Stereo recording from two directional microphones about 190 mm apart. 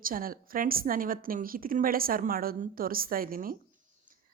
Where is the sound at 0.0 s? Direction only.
50° right (ahead or behind).